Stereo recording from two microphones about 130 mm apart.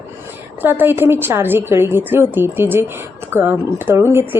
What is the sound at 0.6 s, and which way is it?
Speech, 15° right (ahead or behind).